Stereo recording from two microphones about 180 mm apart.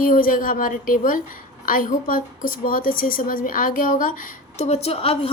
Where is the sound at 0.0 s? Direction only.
50° left (ahead or behind).